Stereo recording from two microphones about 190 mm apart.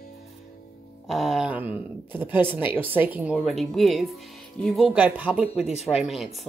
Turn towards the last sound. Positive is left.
turn(degrees=0)  # may be behind; listen again after turning